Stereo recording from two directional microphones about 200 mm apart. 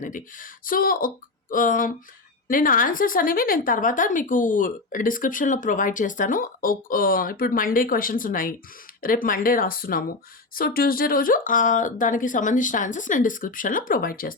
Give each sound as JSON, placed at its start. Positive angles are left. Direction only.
{"t": 0.0, "sound": "speech", "side_deg": 40}